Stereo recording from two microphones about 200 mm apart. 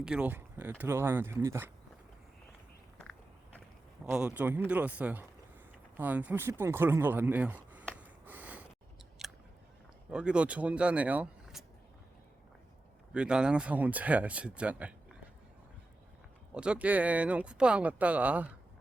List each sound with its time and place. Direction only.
0.0 s speech: 5° right (ahead or behind)
3.0 s biting: 5° left (ahead or behind)
4.0 s speech: 5° right (ahead or behind)
7.9 s a sound: 10° right (ahead or behind)
9.2 s scissors: centre (ahead or behind)
10.1 s speech: 5° right (ahead or behind)
13.1 s speech: 5° right (ahead or behind)
16.6 s speech: 5° right (ahead or behind)